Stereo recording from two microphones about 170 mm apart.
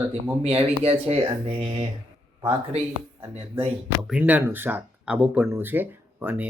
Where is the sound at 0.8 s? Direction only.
35° right (ahead or behind).